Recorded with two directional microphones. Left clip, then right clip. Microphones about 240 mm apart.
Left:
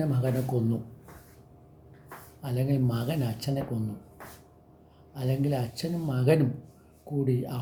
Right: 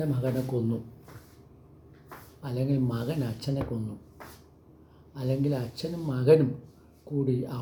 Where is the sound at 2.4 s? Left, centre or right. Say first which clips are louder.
Even; centre.